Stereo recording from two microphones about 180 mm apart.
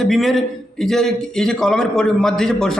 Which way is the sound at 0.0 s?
Centre (ahead or behind).